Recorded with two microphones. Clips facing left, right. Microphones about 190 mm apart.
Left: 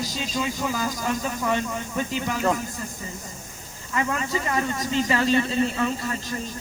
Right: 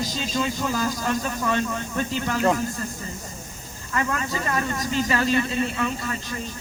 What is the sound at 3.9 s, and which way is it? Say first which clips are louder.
Speech: left 1 dB; 20° left (ahead or behind).